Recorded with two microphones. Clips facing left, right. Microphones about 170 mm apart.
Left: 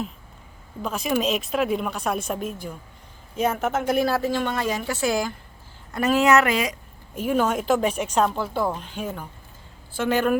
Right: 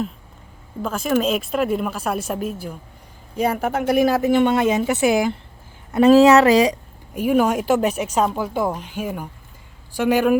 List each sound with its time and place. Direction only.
0.8 s a woman's voice: centre (ahead or behind); by 5.4 s 20° right (ahead or behind)
5.9 s speech: 30° right (ahead or behind)
7.1 s speech: 10° right (ahead or behind)